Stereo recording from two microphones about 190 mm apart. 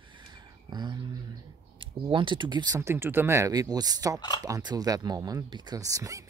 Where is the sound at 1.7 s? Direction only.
25° right (ahead or behind).